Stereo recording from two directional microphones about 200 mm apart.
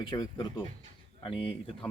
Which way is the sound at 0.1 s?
25° left (ahead or behind).